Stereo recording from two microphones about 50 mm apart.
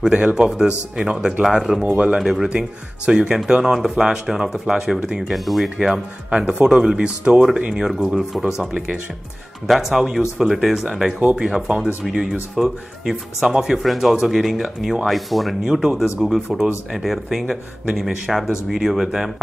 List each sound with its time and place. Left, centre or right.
0.1 s speech: right
0.6 s speech: centre
1.8 s speech: right
2.1 s speech: centre
5.3 s speech: centre
6.6 s speech: centre
7.7 s speech: centre
8.5 s speech: centre
15.6 s speech: centre
16.9 s speech: centre